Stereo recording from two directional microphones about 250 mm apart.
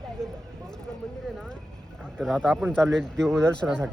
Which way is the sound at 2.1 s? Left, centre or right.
Centre.